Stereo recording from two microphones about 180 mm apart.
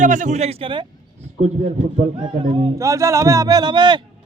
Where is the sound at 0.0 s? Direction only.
45° right (ahead or behind); by 0.9 s 30° right (ahead or behind).